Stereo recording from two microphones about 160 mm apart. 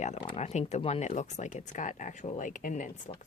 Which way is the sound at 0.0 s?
45° left (ahead or behind).